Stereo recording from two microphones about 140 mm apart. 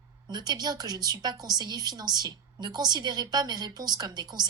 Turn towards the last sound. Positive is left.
turn(degrees=-30)  # may be behind; listen again after turning